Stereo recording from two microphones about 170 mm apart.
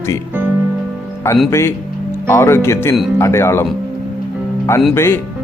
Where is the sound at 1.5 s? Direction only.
15° left (ahead or behind).